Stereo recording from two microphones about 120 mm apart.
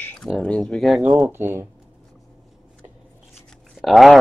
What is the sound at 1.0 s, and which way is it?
Speech, 10° right (ahead or behind).